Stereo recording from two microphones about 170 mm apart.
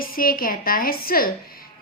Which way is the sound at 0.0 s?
55° left (ahead or behind).